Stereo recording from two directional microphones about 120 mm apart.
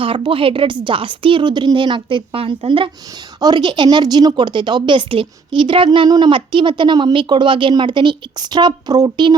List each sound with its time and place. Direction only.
0.0 s a woman's voice: 50° right (ahead or behind)
3.4 s a woman's voice: 40° right (ahead or behind)